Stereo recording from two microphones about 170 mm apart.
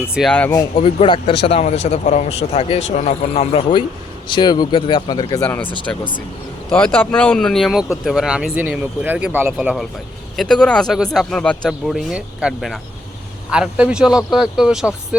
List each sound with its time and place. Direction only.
0.1 s speech: centre (ahead or behind)
0.8 s speech: 30° left (ahead or behind)
5.4 s speech: 5° left (ahead or behind)
6.7 s speech: 10° left (ahead or behind)